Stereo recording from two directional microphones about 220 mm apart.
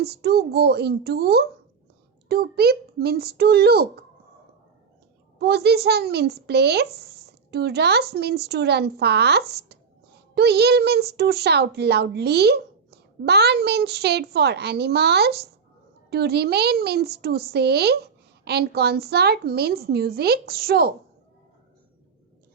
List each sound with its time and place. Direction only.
0.0 s a child's voice: 45° right (ahead or behind)
5.4 s a child's voice: 45° right (ahead or behind)